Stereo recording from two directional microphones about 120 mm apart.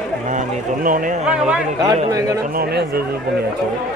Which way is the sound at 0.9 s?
90° right.